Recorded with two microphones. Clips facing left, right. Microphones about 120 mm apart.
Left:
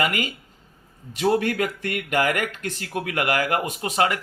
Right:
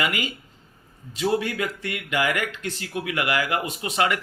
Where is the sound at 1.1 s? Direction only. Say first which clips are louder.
Left 3 dB; 55° left (ahead or behind).